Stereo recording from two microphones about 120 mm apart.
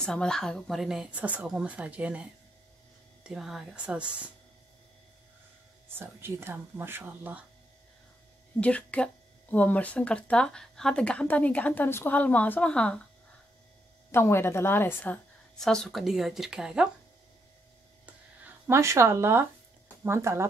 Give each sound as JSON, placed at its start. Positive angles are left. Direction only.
{"t": 0.0, "sound": "speech", "side_deg": 5}
{"t": 3.3, "sound": "speech", "side_deg": -5}
{"t": 5.9, "sound": "speech", "side_deg": -20}
{"t": 8.5, "sound": "a woman's voice", "side_deg": 10}
{"t": 14.1, "sound": "a woman's voice", "side_deg": 20}
{"t": 15.5, "sound": "speech", "side_deg": 5}
{"t": 18.7, "sound": "speech", "side_deg": -25}